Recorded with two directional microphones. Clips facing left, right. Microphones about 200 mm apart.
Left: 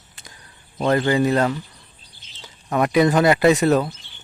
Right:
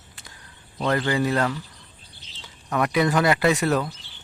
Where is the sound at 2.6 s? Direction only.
25° left (ahead or behind).